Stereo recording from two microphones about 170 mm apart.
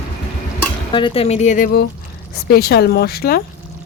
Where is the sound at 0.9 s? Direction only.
30° left (ahead or behind); by 3.4 s 65° left (ahead or behind).